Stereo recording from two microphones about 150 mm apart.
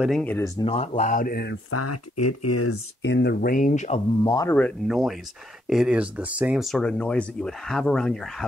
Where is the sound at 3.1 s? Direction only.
85° left; by 4.0 s 55° left (ahead or behind).